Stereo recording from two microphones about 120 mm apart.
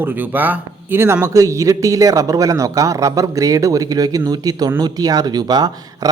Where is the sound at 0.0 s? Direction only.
15° right (ahead or behind).